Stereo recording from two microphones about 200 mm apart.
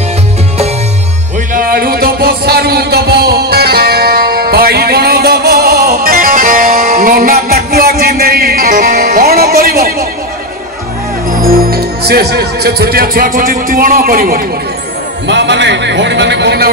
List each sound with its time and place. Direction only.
1.5 s music: 45° right (ahead or behind)
11.2 s speech: 50° right (ahead or behind)
15.2 s a man's voice: 60° right (ahead or behind)